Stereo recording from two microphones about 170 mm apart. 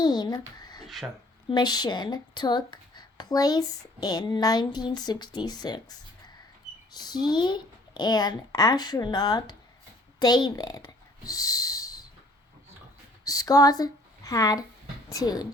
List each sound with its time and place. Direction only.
0.0 s speech: 25° left (ahead or behind)
0.9 s speech: centre (ahead or behind)
1.5 s speech: 25° left (ahead or behind)
13.2 s speech: 20° left (ahead or behind)